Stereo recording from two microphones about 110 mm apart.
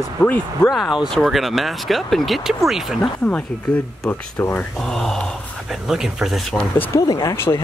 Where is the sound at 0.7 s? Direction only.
Centre (ahead or behind).